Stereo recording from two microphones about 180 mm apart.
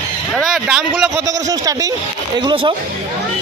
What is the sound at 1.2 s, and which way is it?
Speech, 20° right (ahead or behind).